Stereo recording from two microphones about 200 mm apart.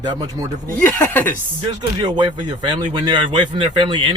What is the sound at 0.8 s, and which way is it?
Speech, 10° left (ahead or behind).